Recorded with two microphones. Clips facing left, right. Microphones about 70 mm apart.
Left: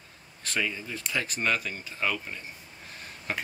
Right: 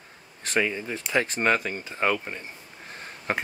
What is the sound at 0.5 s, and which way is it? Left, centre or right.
Speech, right.